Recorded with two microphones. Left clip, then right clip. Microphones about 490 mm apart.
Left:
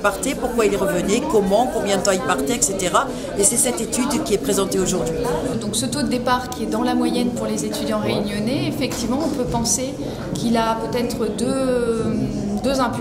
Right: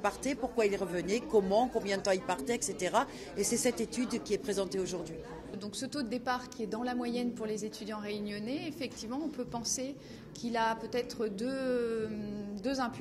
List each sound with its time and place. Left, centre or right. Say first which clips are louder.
0.6 s a woman's voice: left 13 dB; right
6.2 s speech: left 15 dB; right
10.5 s speech: left 11 dB; right